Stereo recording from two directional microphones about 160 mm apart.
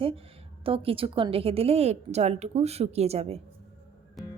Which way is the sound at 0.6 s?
35° right (ahead or behind).